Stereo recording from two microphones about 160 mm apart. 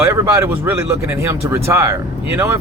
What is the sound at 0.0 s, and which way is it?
Speech, 20° right (ahead or behind).